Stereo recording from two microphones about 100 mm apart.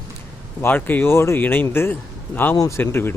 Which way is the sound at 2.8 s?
20° left (ahead or behind).